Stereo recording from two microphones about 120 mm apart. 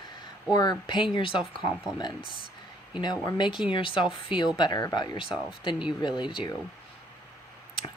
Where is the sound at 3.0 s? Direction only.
40° left (ahead or behind).